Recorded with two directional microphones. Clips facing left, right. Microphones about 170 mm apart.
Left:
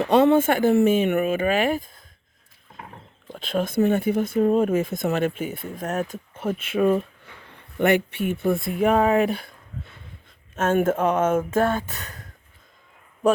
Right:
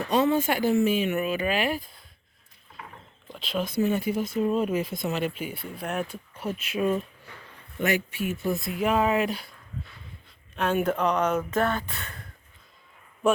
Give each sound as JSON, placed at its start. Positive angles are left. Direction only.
{"t": 0.0, "sound": "speech", "side_deg": 60}
{"t": 3.3, "sound": "speech", "side_deg": 50}
{"t": 6.4, "sound": "speech", "side_deg": 50}
{"t": 11.5, "sound": "speech", "side_deg": 10}
{"t": 11.9, "sound": "speech", "side_deg": 40}
{"t": 13.2, "sound": "a man's voice", "side_deg": 40}